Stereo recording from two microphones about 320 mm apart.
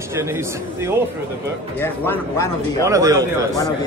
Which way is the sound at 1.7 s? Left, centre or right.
Centre.